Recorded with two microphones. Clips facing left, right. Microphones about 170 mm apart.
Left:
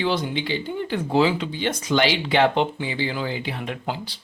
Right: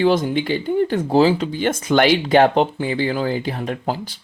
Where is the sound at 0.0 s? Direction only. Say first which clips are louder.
Right 7 dB; 45° right (ahead or behind).